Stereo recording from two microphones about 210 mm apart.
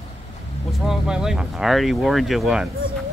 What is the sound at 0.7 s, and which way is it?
Speech, 5° right (ahead or behind).